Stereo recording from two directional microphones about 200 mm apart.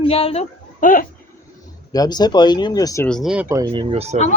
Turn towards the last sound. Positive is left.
turn(degrees=-30)  # may be behind; listen again after turning